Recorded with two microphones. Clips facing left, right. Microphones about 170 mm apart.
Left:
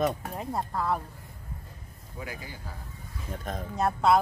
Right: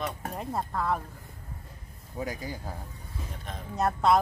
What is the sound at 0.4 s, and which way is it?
Speech, centre (ahead or behind).